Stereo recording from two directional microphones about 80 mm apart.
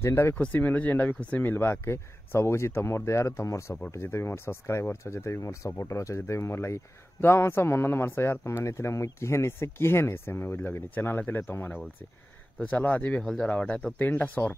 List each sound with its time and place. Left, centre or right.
0.0 s speech: left